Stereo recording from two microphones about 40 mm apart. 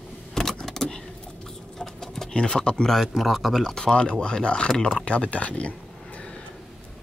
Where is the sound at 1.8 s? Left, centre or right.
Centre.